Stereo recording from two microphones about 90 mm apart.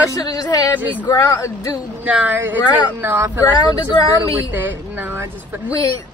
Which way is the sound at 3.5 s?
50° left (ahead or behind).